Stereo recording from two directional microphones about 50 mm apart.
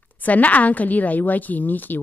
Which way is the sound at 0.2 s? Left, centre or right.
Left.